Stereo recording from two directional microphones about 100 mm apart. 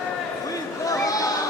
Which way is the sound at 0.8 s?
35° left (ahead or behind).